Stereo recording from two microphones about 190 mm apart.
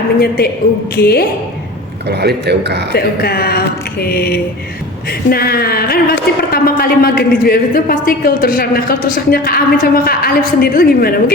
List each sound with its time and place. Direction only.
0.2 s a woman's voice: 55° left (ahead or behind)
2.0 s a man's voice: 60° right (ahead or behind)
2.9 s a woman's voice: 55° left (ahead or behind)